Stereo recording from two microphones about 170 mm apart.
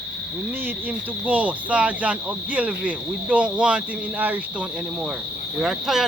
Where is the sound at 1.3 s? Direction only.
10° right (ahead or behind).